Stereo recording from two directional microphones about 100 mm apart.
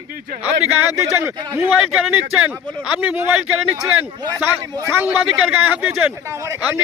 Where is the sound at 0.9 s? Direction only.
30° right (ahead or behind).